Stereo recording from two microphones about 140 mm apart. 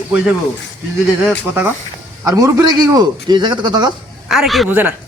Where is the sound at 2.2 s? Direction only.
20° right (ahead or behind).